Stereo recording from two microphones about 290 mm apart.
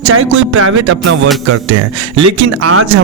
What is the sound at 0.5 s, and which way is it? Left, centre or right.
Speech, right.